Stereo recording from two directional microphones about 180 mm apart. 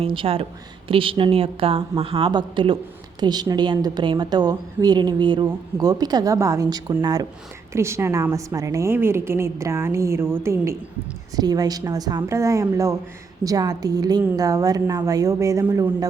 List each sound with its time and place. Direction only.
0.0 s a woman's voice: 30° right (ahead or behind)